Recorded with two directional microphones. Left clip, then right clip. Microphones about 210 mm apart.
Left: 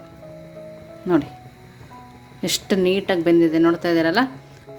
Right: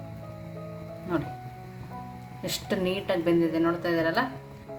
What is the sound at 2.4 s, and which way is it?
A woman's voice, 40° left (ahead or behind).